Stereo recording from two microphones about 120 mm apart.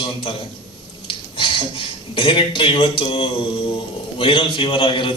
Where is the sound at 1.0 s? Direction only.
45° left (ahead or behind).